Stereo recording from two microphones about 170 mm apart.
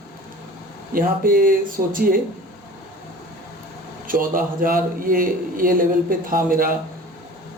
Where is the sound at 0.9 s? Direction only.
55° right (ahead or behind).